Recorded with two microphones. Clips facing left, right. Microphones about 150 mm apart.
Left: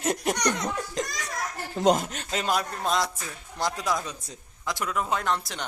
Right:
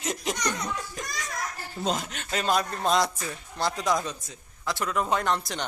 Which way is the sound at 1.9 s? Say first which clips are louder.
Left 5 dB; 50° left (ahead or behind).